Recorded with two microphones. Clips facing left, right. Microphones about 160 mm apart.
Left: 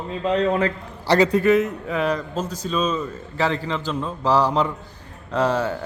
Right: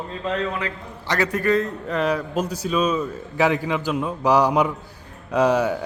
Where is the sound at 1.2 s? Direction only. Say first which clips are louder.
Left 2 dB; 20° left (ahead or behind).